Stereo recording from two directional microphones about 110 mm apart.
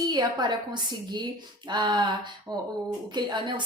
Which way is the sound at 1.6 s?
40° right (ahead or behind).